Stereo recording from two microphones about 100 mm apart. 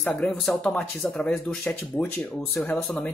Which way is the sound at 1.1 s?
15° left (ahead or behind).